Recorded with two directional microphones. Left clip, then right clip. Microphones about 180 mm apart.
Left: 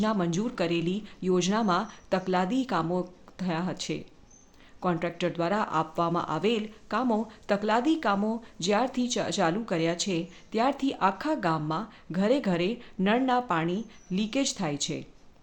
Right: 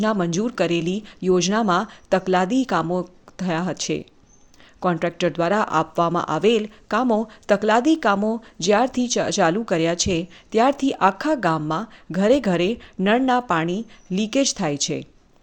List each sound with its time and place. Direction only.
0.0 s speech: 35° right (ahead or behind)